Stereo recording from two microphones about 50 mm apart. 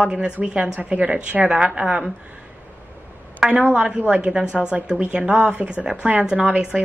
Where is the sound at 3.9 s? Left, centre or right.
Right.